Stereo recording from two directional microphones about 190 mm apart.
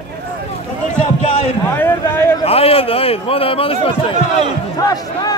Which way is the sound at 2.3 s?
30° left (ahead or behind).